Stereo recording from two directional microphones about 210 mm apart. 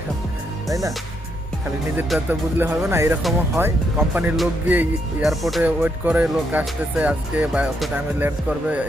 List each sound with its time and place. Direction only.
0.7 s speech: 15° right (ahead or behind)
2.0 s speech: 5° right (ahead or behind)